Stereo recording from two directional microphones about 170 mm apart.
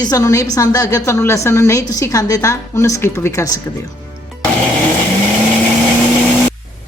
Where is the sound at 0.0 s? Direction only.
20° left (ahead or behind).